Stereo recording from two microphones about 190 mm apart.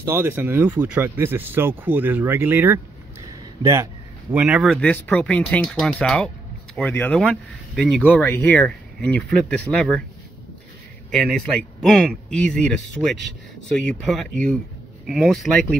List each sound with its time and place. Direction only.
0.0 s speech: 10° right (ahead or behind)
4.3 s speech: 5° right (ahead or behind)
11.8 s speech: centre (ahead or behind)